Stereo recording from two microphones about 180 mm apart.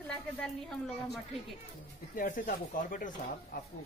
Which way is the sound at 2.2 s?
50° left (ahead or behind).